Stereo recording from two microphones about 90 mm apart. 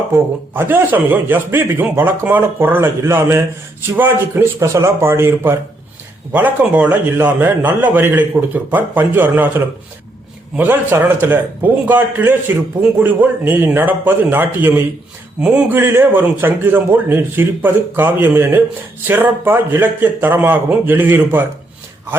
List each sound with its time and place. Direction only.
0.1 s a man's voice: 25° right (ahead or behind)
10.9 s a man's voice: 25° right (ahead or behind)
15.4 s speech: 10° right (ahead or behind)
15.7 s a man's voice: 25° right (ahead or behind)